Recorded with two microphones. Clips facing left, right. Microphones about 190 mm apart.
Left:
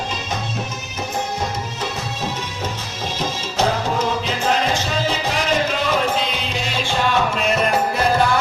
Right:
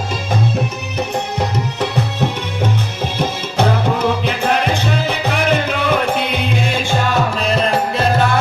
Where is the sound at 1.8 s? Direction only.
65° right (ahead or behind).